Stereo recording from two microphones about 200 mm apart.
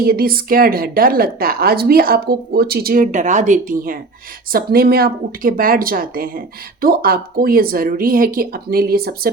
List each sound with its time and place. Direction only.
0.0 s a woman's voice: 45° right (ahead or behind)